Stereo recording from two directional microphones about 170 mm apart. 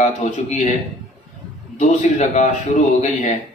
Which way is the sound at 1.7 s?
45° left (ahead or behind).